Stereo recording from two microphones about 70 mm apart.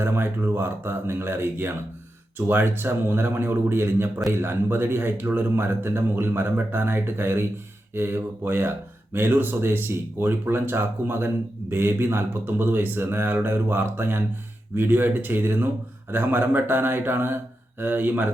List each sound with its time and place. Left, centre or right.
0.0 s a man's voice: right